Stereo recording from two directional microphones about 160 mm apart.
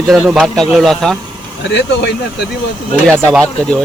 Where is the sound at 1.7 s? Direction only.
90° left.